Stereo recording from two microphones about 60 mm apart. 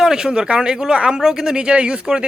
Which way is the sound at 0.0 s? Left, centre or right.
Centre.